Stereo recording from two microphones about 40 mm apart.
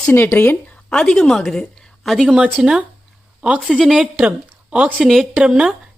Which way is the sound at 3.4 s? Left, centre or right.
Right.